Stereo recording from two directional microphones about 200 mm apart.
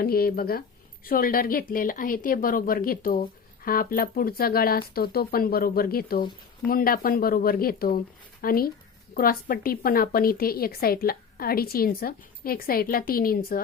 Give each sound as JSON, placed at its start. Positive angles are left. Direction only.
{"t": 0.0, "sound": "a woman's voice", "side_deg": 50}